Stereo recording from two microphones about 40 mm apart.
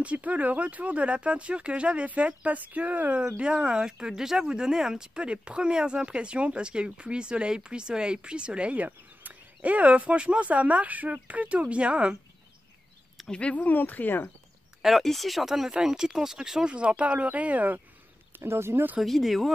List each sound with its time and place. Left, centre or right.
0.0 s speech: right
3.3 s speech: right
8.8 s a sound: right
10.1 s speech: right
13.3 s speech: left
13.7 s speech: left
14.8 s speech: centre
16.6 s speech: right
18.3 s speech: right
19.0 s speech: centre